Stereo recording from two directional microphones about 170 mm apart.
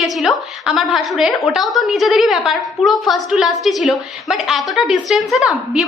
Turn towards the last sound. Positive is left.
turn(degrees=0)  # may be behind; listen again after turning